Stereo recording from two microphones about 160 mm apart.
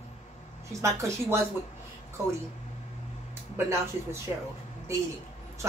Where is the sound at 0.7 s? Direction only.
20° right (ahead or behind).